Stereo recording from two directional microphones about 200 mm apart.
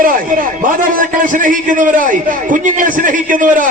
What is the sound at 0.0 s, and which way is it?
A man's voice, 45° right (ahead or behind).